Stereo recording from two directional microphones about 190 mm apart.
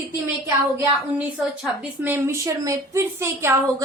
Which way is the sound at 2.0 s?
10° right (ahead or behind).